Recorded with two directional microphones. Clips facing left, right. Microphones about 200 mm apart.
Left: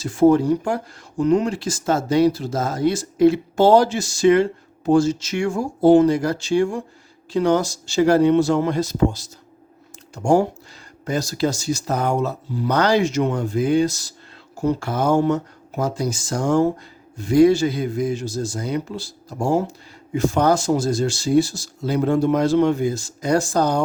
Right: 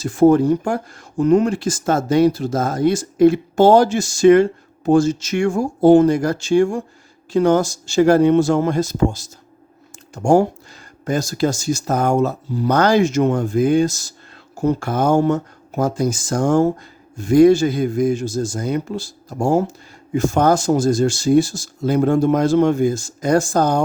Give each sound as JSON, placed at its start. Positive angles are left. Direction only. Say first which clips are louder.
{"t": 0.0, "sound": "speech", "louder": "right 2 dB", "side_deg": -50}
{"t": 11.0, "sound": "speech", "louder": "right 3 dB", "side_deg": -50}